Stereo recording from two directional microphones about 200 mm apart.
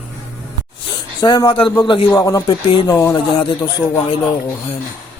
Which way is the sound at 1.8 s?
25° left (ahead or behind).